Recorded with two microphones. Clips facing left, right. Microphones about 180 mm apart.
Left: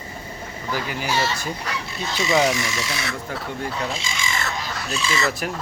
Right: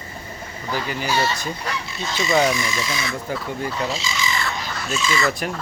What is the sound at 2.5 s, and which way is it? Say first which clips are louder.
Speech: right 1 dB; 70° left (ahead or behind).